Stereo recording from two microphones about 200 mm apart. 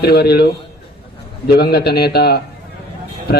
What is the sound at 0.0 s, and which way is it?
Speech, 55° left (ahead or behind).